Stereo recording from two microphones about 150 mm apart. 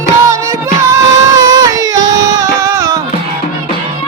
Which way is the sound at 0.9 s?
25° right (ahead or behind).